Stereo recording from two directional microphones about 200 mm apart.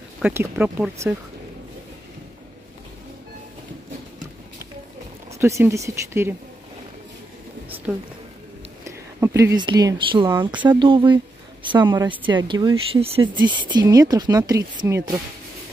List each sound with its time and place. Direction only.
0.2 s speech: 10° right (ahead or behind)
5.4 s speech: 15° right (ahead or behind)
8.8 s speech: 15° right (ahead or behind)
10.5 s speech: 10° right (ahead or behind)
10.8 s speech: 25° right (ahead or behind)